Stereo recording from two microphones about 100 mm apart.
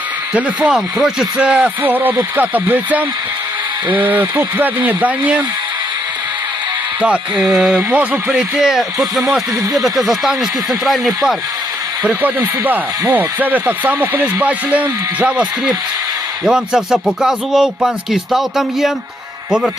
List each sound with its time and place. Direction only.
0.3 s speech: 10° right (ahead or behind)
7.0 s speech: 15° right (ahead or behind)
7.8 s speech: 15° right (ahead or behind)
12.6 s speech: 20° right (ahead or behind)